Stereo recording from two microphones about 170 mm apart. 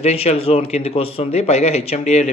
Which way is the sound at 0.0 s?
40° left (ahead or behind).